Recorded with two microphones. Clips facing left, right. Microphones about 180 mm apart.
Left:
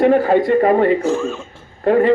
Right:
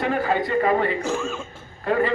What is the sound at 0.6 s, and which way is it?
Speech, 40° left (ahead or behind).